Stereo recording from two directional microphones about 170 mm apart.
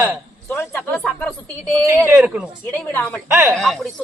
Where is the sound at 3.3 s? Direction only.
15° right (ahead or behind).